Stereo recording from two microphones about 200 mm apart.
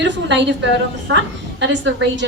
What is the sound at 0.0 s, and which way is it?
A woman's voice, 60° right (ahead or behind).